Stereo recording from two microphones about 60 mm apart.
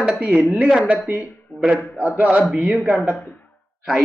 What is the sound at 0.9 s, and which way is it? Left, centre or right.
Speech, right.